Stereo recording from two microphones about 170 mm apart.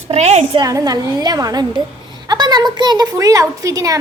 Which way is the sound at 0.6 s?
20° right (ahead or behind).